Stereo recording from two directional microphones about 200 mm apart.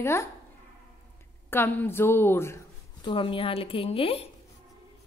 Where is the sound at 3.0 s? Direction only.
25° left (ahead or behind).